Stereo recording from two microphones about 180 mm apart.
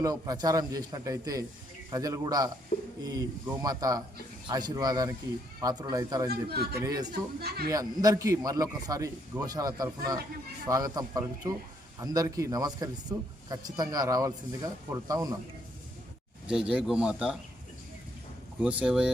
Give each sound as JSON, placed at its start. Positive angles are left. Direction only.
{"t": 0.0, "sound": "a man's voice", "side_deg": -20}
{"t": 6.5, "sound": "speech", "side_deg": -60}
{"t": 6.8, "sound": "a man's voice", "side_deg": -20}
{"t": 7.1, "sound": "speech", "side_deg": -60}
{"t": 7.7, "sound": "a man's voice", "side_deg": -20}
{"t": 16.5, "sound": "speech", "side_deg": -5}
{"t": 18.6, "sound": "speech", "side_deg": -5}